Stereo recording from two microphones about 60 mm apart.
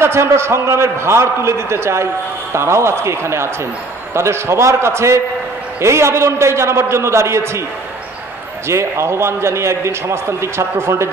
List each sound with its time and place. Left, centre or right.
0.0 s a man's voice: right
8.6 s a man's voice: right